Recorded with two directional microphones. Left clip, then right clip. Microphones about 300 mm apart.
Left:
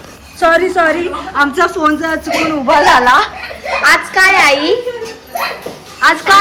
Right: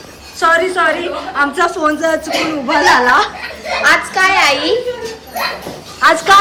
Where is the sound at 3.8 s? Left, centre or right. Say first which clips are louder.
Left 2 dB; left.